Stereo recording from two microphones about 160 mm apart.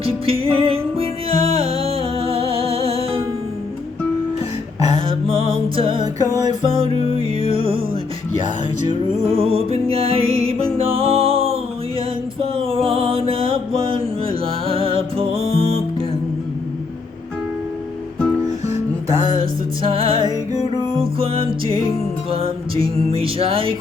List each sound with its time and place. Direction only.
0.0 s music: 35° right (ahead or behind)
4.9 s music: 35° right (ahead or behind)
9.3 s music: 35° right (ahead or behind)
12.5 s mantra: 35° right (ahead or behind)
19.8 s music: 35° right (ahead or behind)